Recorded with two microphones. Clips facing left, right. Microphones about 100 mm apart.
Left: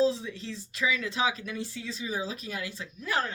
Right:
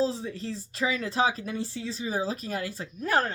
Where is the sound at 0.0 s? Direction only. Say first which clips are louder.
Left 1 dB; 40° right (ahead or behind).